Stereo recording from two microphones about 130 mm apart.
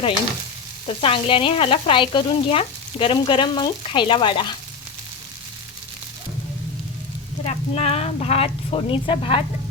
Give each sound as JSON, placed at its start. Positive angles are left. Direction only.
{"t": 1.0, "sound": "speech", "side_deg": 45}
{"t": 7.4, "sound": "a woman's voice", "side_deg": 55}